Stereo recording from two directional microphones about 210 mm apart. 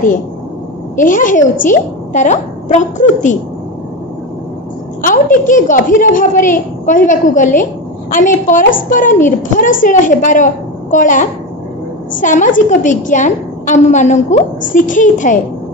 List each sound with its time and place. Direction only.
0.9 s a woman's voice: 40° left (ahead or behind)
5.0 s a woman's voice: 40° left (ahead or behind)